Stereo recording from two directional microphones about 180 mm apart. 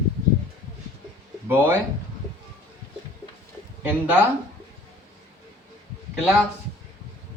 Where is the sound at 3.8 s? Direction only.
10° right (ahead or behind).